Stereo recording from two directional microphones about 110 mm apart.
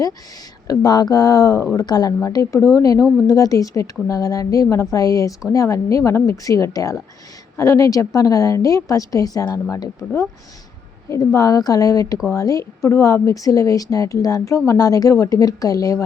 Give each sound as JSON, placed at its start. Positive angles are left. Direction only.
{"t": 0.7, "sound": "a woman's voice", "side_deg": 35}
{"t": 11.1, "sound": "a woman's voice", "side_deg": 30}